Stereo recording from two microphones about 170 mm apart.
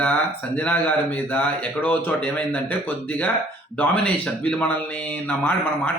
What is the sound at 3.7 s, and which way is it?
Speech, 10° left (ahead or behind).